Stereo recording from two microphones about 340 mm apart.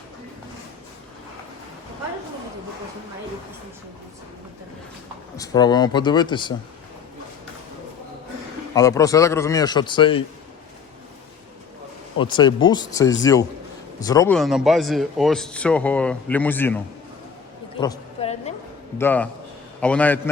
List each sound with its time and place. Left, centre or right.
5.4 s a man's voice: centre
8.7 s a man's voice: centre
12.2 s a man's voice: centre
17.7 s a sound: centre
18.9 s a man's voice: centre